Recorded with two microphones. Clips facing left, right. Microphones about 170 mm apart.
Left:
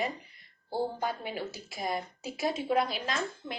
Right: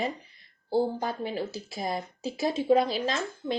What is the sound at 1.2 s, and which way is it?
A woman's voice, 30° right (ahead or behind).